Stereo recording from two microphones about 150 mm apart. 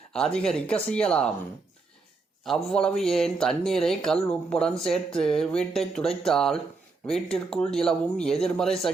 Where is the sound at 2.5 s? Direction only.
5° left (ahead or behind).